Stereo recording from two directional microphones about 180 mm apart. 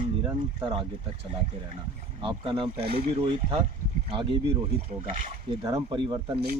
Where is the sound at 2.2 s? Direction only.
25° right (ahead or behind).